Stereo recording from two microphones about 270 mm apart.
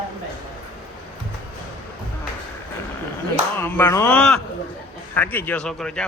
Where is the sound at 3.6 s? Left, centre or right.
Centre.